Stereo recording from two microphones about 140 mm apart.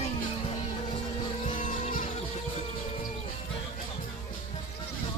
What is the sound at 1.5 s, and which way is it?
Vehicle, 65° left (ahead or behind).